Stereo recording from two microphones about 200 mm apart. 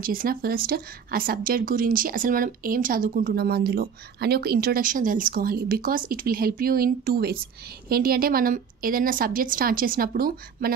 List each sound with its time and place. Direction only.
0.0 s speech: 45° right (ahead or behind)